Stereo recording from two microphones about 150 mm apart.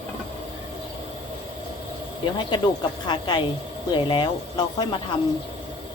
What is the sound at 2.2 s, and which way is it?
Speech, 30° left (ahead or behind).